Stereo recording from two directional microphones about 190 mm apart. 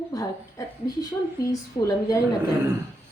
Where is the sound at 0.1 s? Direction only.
20° left (ahead or behind).